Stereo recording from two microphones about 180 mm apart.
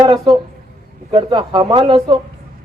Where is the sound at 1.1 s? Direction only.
25° right (ahead or behind).